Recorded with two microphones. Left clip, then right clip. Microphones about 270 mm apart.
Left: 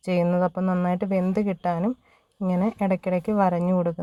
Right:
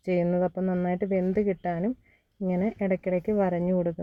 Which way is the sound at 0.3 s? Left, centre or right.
Left.